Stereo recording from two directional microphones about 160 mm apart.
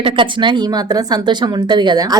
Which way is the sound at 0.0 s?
30° right (ahead or behind).